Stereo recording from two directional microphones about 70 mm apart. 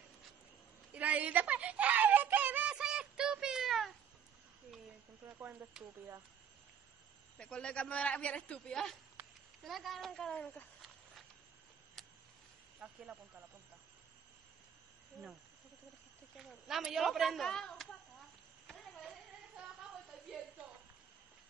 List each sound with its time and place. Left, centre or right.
0.9 s music: right; by 3.9 s centre
5.7 s speech: centre
7.3 s a man's voice: centre
9.2 s a sound: right
9.7 s a woman's voice: centre
12.0 s a sound: centre
12.8 s speech: centre
16.3 s a woman's voice: centre